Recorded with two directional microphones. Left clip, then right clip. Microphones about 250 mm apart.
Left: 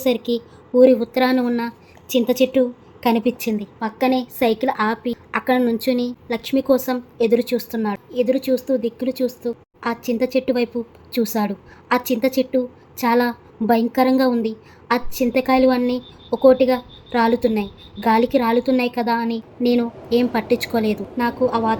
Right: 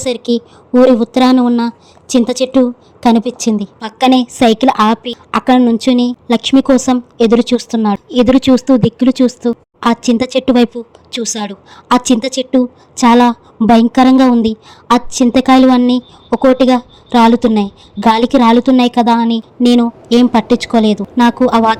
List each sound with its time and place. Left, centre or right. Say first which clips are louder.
0.0 s a woman's voice: right 5 dB; right